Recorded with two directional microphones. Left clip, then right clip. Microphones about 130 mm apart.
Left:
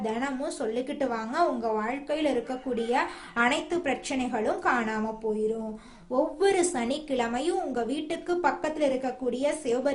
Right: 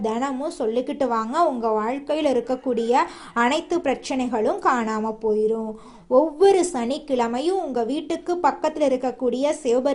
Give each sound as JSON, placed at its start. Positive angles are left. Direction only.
{"t": 0.0, "sound": "a woman's voice", "side_deg": -35}